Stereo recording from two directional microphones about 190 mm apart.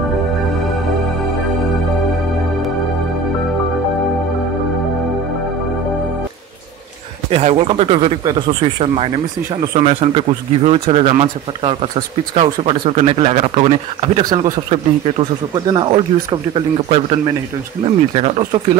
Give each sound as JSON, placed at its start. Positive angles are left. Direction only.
{"t": 7.2, "sound": "speech", "side_deg": -30}
{"t": 15.5, "sound": "speech", "side_deg": -20}